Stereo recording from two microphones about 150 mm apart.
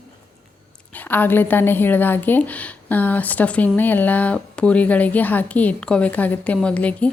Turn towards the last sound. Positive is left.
turn(degrees=10)  # may be behind; listen again after turning